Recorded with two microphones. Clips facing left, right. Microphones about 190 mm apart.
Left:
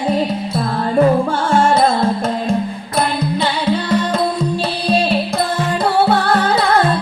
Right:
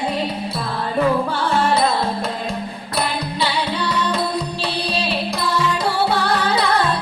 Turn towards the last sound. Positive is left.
turn(degrees=50)  # may be behind; listen again after turning